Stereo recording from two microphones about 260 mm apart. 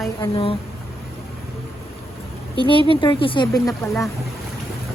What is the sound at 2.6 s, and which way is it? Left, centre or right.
Speech, centre.